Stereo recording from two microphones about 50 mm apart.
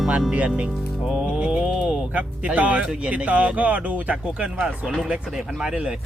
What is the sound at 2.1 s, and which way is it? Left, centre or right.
A man's voice, right.